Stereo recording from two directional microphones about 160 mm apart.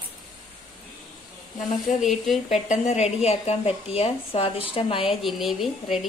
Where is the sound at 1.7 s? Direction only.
50° left (ahead or behind).